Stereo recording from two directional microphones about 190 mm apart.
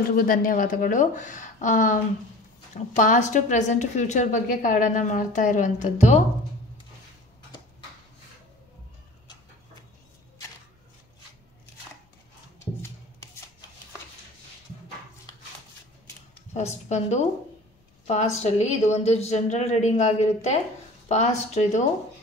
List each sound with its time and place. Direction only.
0.1 s a woman's voice: 50° left (ahead or behind)
3.0 s a woman's voice: 40° left (ahead or behind)
12.5 s music: 15° left (ahead or behind)
16.5 s a woman's voice: 35° left (ahead or behind)